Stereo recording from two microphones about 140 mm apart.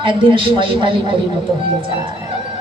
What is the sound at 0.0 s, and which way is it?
Speech, 35° right (ahead or behind).